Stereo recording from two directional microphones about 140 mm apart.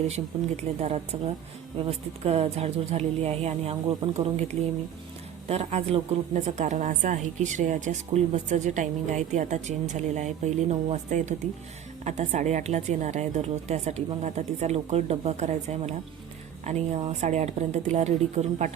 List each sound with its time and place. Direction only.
0.1 s a woman's voice: 50° right (ahead or behind)
5.5 s a woman's voice: 45° right (ahead or behind)